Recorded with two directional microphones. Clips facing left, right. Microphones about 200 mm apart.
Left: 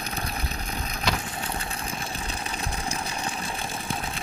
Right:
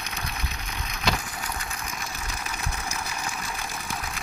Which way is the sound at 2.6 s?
30° left (ahead or behind).